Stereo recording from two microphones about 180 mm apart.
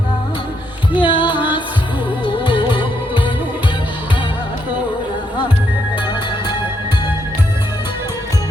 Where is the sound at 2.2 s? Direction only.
30° left (ahead or behind).